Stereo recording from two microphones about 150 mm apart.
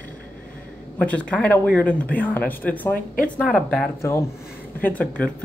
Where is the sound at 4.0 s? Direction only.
20° left (ahead or behind).